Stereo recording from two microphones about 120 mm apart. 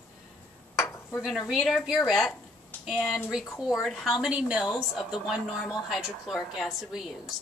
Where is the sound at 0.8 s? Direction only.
25° left (ahead or behind).